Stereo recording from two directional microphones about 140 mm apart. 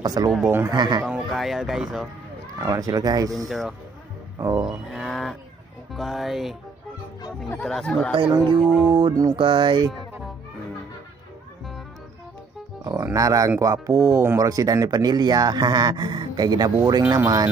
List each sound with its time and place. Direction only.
0.0 s speech: 30° right (ahead or behind)
0.5 s speech: 15° right (ahead or behind)
0.7 s music: 30° right (ahead or behind)
1.0 s speech: centre (ahead or behind)
2.6 s speech: 25° right (ahead or behind)
3.4 s speech: centre (ahead or behind)
4.4 s speech: 25° right (ahead or behind)
4.6 s cattle: centre (ahead or behind)
5.9 s speech: centre (ahead or behind)
7.6 s speech: 5° left (ahead or behind)
8.1 s music: 35° right (ahead or behind)
8.6 s speech: centre (ahead or behind)
8.9 s music: 30° right (ahead or behind)
12.8 s speech: 25° right (ahead or behind)